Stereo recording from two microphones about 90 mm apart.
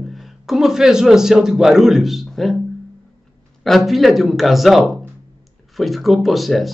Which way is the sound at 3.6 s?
Centre (ahead or behind).